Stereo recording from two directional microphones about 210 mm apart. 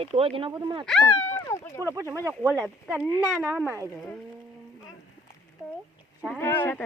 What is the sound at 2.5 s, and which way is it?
Speech, centre (ahead or behind).